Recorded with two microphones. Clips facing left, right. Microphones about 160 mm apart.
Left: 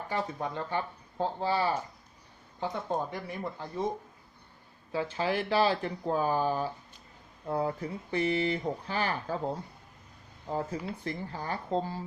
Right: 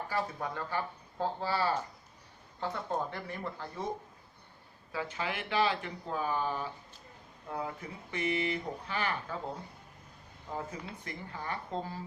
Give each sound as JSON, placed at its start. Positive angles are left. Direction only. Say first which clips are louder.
{"t": 0.1, "sound": "speech", "louder": "left 3 dB", "side_deg": 20}
{"t": 4.9, "sound": "speech", "louder": "left 6 dB", "side_deg": 30}
{"t": 10.5, "sound": "speech", "louder": "left 6 dB", "side_deg": 35}